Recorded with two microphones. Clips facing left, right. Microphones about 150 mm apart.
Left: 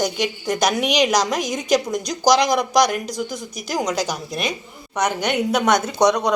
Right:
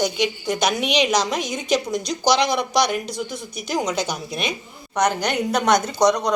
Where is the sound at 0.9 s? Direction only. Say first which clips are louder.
Left 1 dB; 40° left (ahead or behind).